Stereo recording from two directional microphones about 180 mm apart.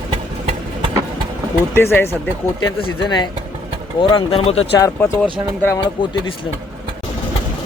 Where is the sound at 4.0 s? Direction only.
30° left (ahead or behind).